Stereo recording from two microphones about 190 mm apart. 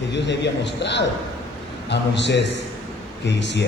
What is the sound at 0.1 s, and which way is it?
A man's voice, 65° left (ahead or behind).